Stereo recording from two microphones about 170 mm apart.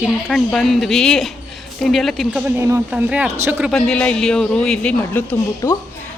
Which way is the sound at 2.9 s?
5° right (ahead or behind).